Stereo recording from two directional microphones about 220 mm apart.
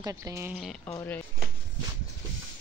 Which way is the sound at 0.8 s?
10° left (ahead or behind).